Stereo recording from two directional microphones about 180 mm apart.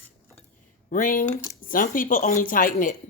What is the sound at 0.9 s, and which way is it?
A woman's voice, 50° left (ahead or behind).